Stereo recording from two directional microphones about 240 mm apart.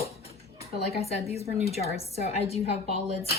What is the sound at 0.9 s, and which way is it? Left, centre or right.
Speech, left.